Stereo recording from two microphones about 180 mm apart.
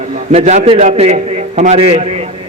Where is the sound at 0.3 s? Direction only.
40° right (ahead or behind).